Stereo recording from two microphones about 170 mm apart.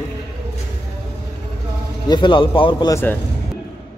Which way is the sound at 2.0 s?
25° left (ahead or behind).